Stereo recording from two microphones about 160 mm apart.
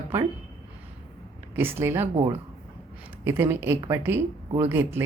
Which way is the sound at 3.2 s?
15° right (ahead or behind).